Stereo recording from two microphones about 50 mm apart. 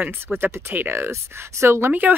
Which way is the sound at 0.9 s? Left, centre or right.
Right.